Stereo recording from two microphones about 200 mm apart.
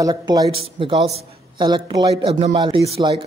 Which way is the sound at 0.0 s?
20° right (ahead or behind).